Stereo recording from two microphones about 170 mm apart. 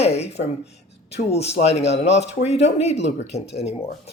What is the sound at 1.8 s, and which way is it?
Speech, 85° left.